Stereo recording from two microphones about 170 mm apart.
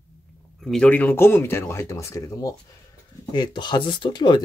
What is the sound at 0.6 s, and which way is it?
Speech, 5° left (ahead or behind).